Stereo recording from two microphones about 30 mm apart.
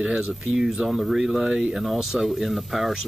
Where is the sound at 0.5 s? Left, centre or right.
Centre.